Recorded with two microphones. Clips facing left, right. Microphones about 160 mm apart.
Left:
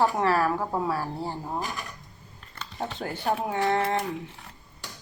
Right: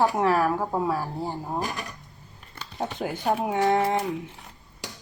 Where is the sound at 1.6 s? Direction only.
75° right (ahead or behind).